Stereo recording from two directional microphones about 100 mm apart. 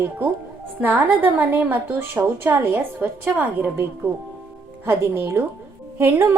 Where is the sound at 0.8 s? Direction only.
15° right (ahead or behind).